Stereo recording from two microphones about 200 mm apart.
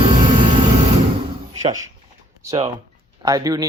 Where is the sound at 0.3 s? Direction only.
30° right (ahead or behind).